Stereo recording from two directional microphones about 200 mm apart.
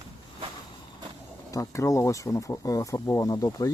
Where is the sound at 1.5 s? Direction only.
15° left (ahead or behind).